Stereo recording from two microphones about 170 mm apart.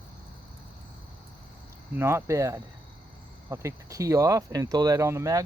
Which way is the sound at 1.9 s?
15° right (ahead or behind).